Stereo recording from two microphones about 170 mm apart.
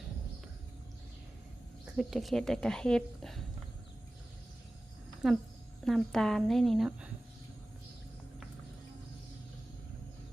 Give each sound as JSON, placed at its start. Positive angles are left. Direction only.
{"t": 1.8, "sound": "speech", "side_deg": -5}
{"t": 5.2, "sound": "speech", "side_deg": 0}